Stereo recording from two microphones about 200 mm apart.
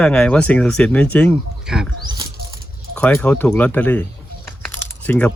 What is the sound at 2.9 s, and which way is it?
Speech, 5° left (ahead or behind).